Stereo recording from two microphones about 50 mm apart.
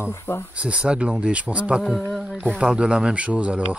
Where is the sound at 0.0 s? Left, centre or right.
Left.